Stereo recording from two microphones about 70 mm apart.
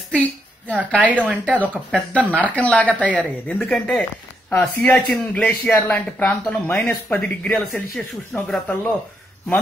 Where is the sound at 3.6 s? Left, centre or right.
Centre.